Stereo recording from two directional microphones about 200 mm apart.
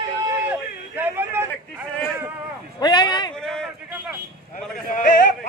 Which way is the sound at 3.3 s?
5° left (ahead or behind).